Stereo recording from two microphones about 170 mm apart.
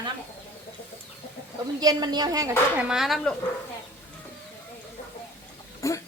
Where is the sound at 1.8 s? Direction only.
25° right (ahead or behind).